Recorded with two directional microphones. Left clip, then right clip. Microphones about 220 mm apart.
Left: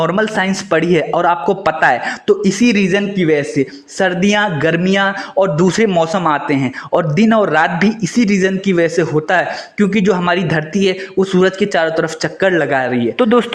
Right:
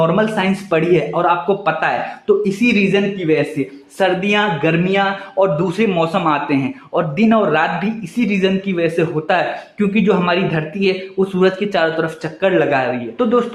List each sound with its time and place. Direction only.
0.0 s speech: 35° left (ahead or behind)